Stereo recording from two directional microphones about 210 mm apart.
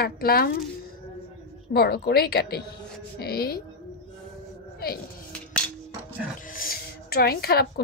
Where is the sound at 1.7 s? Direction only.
50° left (ahead or behind).